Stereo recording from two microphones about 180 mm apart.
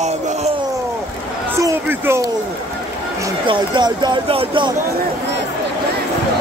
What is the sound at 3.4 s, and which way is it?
Speech, 25° right (ahead or behind).